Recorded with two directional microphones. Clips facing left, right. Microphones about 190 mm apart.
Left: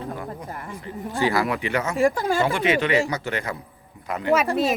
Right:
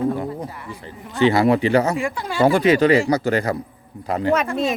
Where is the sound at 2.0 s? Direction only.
35° left (ahead or behind).